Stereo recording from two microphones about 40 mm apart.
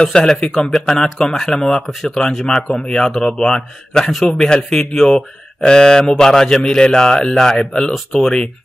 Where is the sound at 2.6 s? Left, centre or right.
Left.